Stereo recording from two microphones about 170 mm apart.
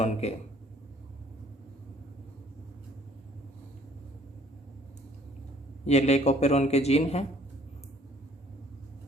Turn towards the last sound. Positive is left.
turn(degrees=40)  # may be behind; listen again after turning